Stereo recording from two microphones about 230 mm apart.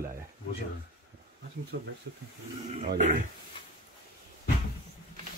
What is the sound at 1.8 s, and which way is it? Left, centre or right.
Speech, right.